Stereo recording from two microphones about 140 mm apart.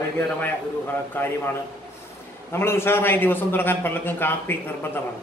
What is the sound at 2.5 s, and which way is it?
A man's voice, 15° left (ahead or behind).